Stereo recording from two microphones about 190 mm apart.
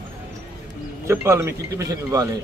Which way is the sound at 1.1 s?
15° right (ahead or behind).